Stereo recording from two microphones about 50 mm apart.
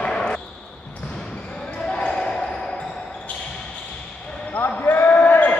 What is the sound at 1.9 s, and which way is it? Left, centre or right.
Basketball bounce, centre.